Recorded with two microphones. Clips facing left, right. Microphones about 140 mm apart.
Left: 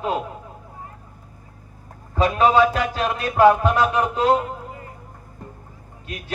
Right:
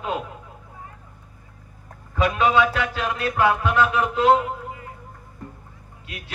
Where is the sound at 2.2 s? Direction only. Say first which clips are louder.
Left 3 dB; 35° left (ahead or behind).